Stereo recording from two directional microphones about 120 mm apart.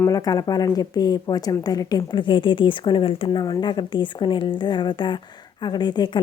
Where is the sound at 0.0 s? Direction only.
30° left (ahead or behind).